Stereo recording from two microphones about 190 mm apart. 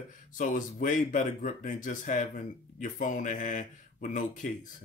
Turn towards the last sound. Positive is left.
turn(degrees=40)  # may be behind; listen again after turning